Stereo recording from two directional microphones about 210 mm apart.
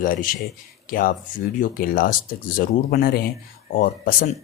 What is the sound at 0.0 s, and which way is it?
A man's voice, 40° left (ahead or behind).